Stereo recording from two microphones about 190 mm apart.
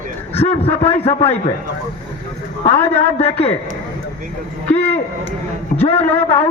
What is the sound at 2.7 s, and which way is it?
Speech, 10° left (ahead or behind).